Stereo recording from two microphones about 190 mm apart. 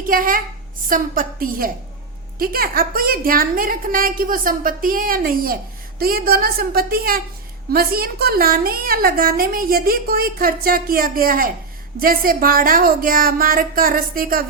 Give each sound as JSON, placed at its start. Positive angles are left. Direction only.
{"t": 0.0, "sound": "a woman's voice", "side_deg": -50}